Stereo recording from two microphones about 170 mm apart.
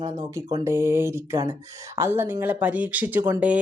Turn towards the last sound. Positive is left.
turn(degrees=-10)  # may be behind; listen again after turning